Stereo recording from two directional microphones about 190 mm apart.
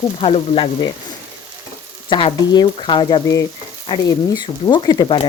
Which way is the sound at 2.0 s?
25° left (ahead or behind).